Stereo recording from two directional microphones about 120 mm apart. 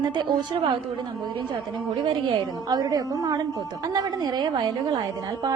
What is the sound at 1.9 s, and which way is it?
A woman's voice, 40° right (ahead or behind).